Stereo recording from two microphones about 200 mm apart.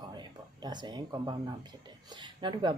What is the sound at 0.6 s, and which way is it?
Speech, 20° right (ahead or behind).